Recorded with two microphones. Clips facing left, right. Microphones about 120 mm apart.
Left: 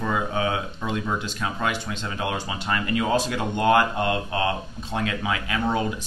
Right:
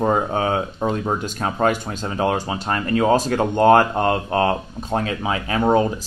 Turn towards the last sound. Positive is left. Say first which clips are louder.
# right 7 dB
turn(degrees=-40)  # may be behind; listen again after turning